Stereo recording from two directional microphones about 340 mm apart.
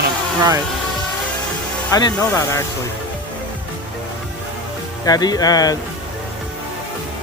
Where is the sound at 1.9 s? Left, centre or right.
Centre.